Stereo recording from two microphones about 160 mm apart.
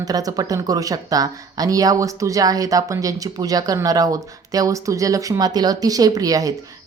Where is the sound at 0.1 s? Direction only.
25° right (ahead or behind).